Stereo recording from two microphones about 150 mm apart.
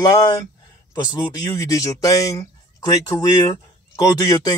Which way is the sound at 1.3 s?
25° left (ahead or behind).